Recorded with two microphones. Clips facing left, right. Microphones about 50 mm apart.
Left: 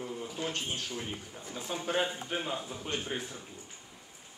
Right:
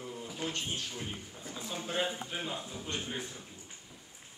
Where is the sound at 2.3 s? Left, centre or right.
Centre.